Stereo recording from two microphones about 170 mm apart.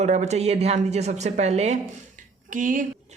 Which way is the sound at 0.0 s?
40° right (ahead or behind).